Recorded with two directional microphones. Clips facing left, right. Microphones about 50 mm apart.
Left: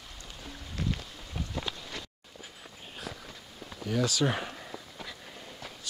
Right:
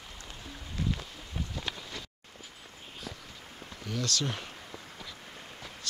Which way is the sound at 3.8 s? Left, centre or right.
Centre.